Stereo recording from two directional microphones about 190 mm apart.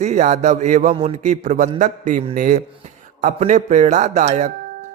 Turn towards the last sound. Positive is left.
turn(degrees=-40)  # may be behind; listen again after turning